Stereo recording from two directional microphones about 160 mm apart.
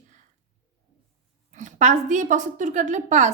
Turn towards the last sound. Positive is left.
turn(degrees=-50)  # may be behind; listen again after turning